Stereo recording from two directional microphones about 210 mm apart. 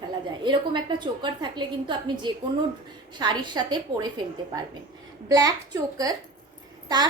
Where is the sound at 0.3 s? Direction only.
20° right (ahead or behind).